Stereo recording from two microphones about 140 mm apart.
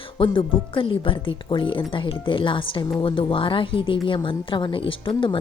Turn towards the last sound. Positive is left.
turn(degrees=40)  # may be behind; listen again after turning